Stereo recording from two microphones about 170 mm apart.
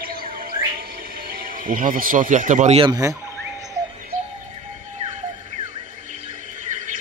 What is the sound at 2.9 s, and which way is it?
Speech, 20° right (ahead or behind).